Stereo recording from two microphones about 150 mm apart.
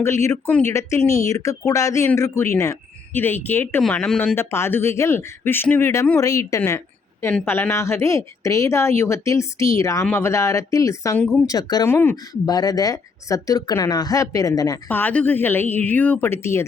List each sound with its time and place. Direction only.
0.0 s speech: 20° left (ahead or behind)
4.4 s speech: 15° left (ahead or behind)
6.6 s a sound: 15° left (ahead or behind)
7.4 s speech: 15° left (ahead or behind)
14.8 s speech: 10° left (ahead or behind)